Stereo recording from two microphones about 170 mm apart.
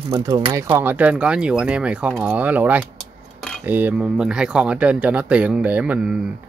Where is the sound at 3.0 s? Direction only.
5° left (ahead or behind).